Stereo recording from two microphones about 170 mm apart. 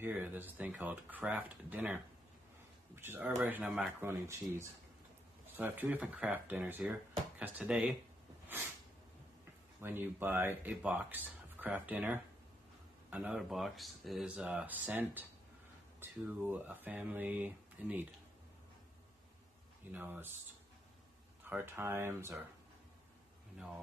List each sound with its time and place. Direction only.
0.0 s speech: 10° right (ahead or behind)
3.0 s speech: 10° right (ahead or behind)
9.8 s speech: 10° right (ahead or behind)
19.9 s speech: 10° right (ahead or behind)
21.5 s speech: 15° right (ahead or behind)